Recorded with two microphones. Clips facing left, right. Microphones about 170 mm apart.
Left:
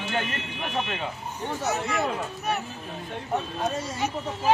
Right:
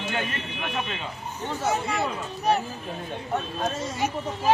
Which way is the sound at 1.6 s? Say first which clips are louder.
Right 3 dB; 30° right (ahead or behind).